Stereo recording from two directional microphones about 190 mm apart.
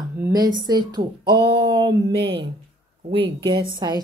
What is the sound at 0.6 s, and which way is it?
Speech, 20° right (ahead or behind).